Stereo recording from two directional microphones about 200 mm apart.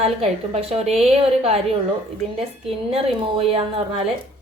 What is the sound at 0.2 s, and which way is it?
A woman's voice, 30° right (ahead or behind).